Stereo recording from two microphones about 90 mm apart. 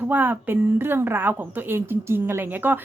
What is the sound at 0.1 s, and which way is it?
Speech, 20° right (ahead or behind).